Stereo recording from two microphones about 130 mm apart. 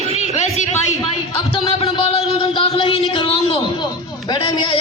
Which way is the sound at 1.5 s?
45° left (ahead or behind).